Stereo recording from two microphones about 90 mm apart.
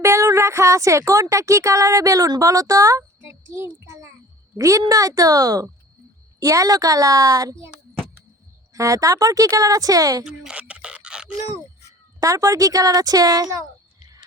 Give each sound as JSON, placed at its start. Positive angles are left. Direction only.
{"t": 0.0, "sound": "speech", "side_deg": -35}
{"t": 8.7, "sound": "speech", "side_deg": -40}
{"t": 10.2, "sound": "a sound", "side_deg": -10}
{"t": 12.2, "sound": "speech", "side_deg": -40}